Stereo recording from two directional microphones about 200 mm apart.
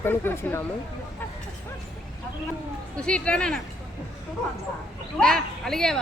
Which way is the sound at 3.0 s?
5° left (ahead or behind).